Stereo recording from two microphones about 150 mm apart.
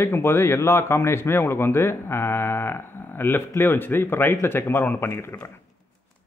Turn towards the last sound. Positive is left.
turn(degrees=15)  # may be behind; listen again after turning